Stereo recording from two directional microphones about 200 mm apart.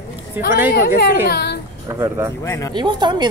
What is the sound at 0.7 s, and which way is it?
Speech, 50° left (ahead or behind).